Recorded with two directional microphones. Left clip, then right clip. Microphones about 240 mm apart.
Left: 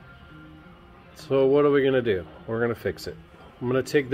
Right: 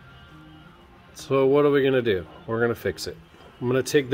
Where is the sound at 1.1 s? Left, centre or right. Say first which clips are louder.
Right 1 dB; right.